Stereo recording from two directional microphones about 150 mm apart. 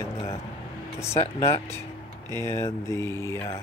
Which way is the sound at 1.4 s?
20° left (ahead or behind).